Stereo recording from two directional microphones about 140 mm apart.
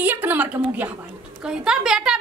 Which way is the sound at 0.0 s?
15° right (ahead or behind).